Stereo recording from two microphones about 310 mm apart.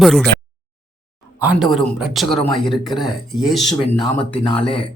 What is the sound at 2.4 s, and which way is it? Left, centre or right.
Speech, centre.